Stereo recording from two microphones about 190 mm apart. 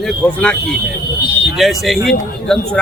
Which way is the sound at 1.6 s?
Centre (ahead or behind).